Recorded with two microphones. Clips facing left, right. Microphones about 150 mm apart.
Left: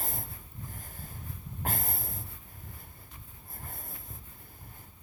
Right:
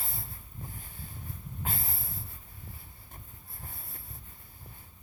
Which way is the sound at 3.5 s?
45° left (ahead or behind).